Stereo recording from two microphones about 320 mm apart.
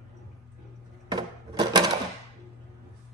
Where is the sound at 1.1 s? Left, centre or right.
Centre.